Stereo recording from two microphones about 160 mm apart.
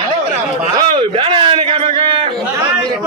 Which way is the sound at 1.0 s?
30° right (ahead or behind).